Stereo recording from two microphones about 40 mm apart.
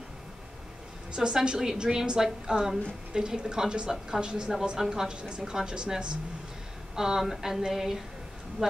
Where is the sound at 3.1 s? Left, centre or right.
Centre.